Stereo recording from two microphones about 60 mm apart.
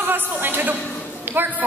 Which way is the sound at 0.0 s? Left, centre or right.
Right.